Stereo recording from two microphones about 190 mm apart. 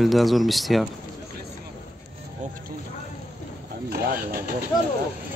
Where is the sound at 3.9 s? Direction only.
55° right (ahead or behind).